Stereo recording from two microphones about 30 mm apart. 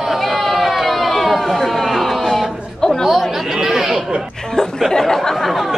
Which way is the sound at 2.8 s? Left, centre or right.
Centre.